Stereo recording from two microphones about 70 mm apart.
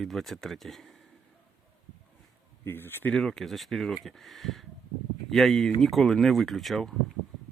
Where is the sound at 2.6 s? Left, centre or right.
Left.